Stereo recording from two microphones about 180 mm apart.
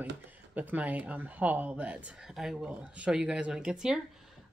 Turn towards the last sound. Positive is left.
turn(degrees=-5)  # may be behind; listen again after turning